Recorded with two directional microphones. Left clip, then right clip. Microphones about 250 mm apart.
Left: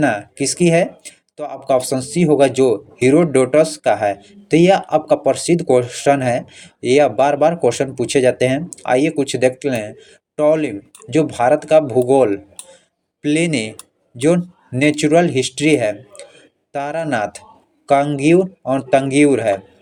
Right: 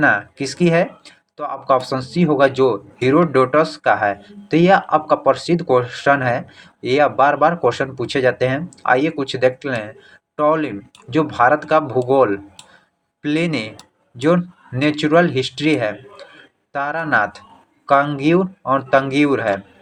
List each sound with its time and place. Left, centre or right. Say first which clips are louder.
0.0 s speech: right 2 dB; left